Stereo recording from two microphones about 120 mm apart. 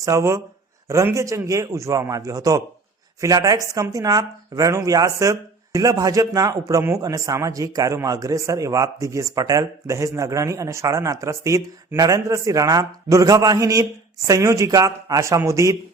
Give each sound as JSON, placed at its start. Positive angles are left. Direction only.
{"t": 0.0, "sound": "a man's voice", "side_deg": -25}